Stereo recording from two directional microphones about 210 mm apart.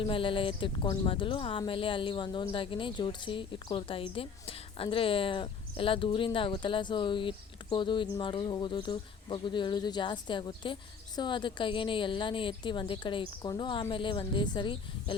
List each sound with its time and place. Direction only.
0.0 s speech: 25° left (ahead or behind)